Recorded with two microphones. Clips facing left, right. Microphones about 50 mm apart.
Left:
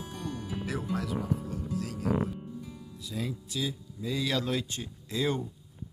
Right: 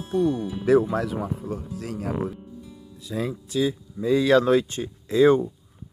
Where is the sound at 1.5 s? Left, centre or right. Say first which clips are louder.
Right 2 dB; right.